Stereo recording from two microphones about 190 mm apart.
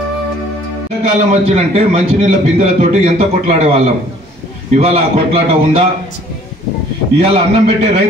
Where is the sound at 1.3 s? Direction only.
30° right (ahead or behind).